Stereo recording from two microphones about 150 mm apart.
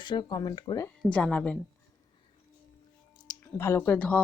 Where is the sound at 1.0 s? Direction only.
5° left (ahead or behind).